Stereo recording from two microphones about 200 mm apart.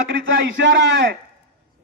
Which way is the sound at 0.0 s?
65° right (ahead or behind).